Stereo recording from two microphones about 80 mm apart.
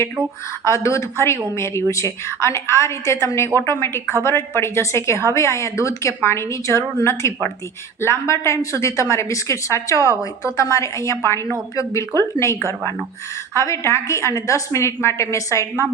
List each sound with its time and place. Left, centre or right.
0.6 s a woman's voice: left
13.6 s a woman's voice: left